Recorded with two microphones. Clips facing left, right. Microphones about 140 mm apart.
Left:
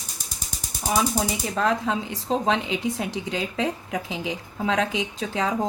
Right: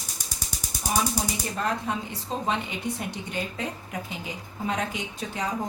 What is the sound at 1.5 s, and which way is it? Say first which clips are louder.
Speech: left 6 dB; 90° left.